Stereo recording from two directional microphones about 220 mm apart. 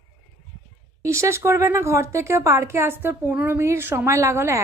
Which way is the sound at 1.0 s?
10° right (ahead or behind).